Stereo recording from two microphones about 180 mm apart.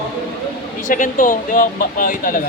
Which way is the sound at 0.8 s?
45° left (ahead or behind).